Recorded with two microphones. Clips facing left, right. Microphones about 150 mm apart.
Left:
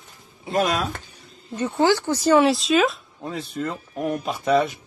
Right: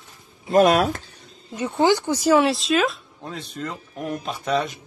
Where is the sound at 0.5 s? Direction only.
55° right (ahead or behind).